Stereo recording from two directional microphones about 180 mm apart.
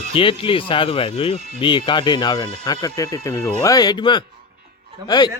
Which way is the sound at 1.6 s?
25° left (ahead or behind).